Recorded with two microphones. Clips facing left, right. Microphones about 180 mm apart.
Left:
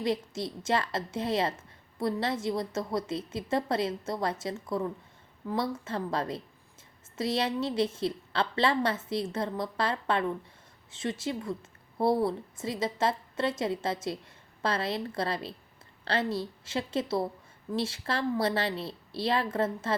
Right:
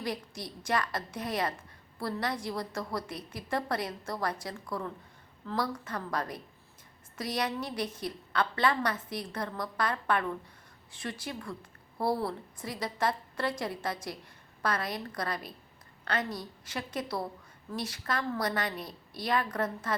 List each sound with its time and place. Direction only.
0.0 s a woman's voice: 25° left (ahead or behind)